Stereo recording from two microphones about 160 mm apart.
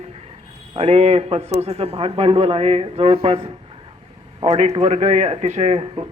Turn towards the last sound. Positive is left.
turn(degrees=-40)  # may be behind; listen again after turning